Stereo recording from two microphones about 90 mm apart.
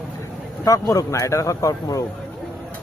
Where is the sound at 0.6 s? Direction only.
40° left (ahead or behind).